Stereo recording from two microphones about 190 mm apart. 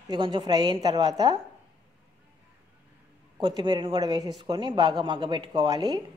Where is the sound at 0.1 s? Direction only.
25° right (ahead or behind).